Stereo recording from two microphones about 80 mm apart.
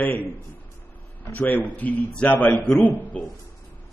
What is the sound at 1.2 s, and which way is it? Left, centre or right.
A man's voice, left.